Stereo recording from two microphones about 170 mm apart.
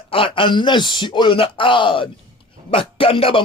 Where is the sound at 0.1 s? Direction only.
30° left (ahead or behind).